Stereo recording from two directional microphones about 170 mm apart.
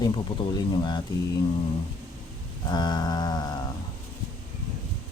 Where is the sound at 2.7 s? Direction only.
25° left (ahead or behind).